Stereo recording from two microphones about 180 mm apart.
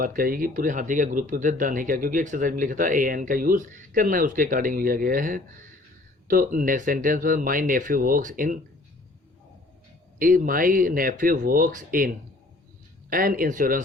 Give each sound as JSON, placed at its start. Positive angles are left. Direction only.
{"t": 0.0, "sound": "speech", "side_deg": -50}
{"t": 10.2, "sound": "speech", "side_deg": -50}